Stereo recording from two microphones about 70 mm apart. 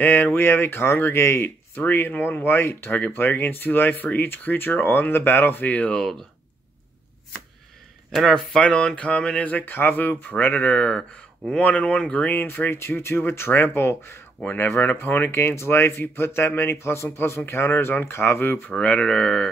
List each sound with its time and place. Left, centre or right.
0.0 s speech: left; by 6.2 s centre
8.1 s speech: centre
8.6 s speech: centre; by 14.2 s left
14.4 s speech: left
18.7 s speech: centre